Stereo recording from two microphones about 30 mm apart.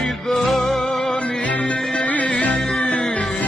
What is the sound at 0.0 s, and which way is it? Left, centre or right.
Music, centre.